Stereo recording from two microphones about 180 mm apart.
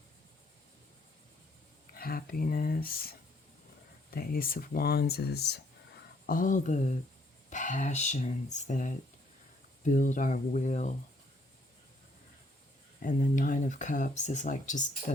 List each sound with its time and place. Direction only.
2.0 s speech: 55° left (ahead or behind)
6.2 s speech: 50° left (ahead or behind)
13.0 s speech: 45° left (ahead or behind)